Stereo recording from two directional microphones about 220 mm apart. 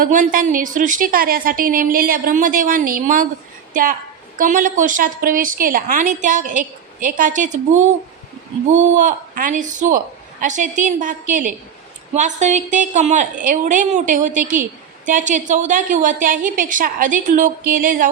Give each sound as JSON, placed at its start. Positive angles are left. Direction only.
{"t": 0.0, "sound": "a woman's voice", "side_deg": -35}
{"t": 4.4, "sound": "a woman's voice", "side_deg": -35}
{"t": 8.6, "sound": "a woman's voice", "side_deg": -35}